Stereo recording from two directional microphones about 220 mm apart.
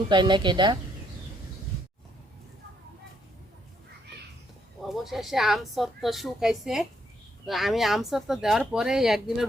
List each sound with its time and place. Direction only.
0.1 s a woman's voice: 20° right (ahead or behind)
4.9 s speech: centre (ahead or behind)